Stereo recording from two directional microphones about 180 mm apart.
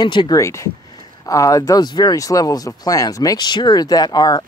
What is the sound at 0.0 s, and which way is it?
Speech, 25° left (ahead or behind).